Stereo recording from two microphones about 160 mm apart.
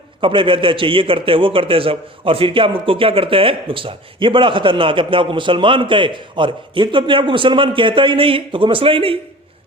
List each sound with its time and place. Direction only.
0.2 s a man's voice: 35° right (ahead or behind)